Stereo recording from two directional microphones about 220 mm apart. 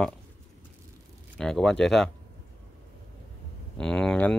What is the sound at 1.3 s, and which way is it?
Speech, 5° left (ahead or behind).